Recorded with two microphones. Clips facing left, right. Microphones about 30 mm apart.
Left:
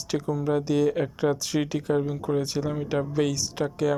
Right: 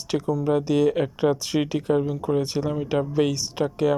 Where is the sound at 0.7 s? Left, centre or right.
Right.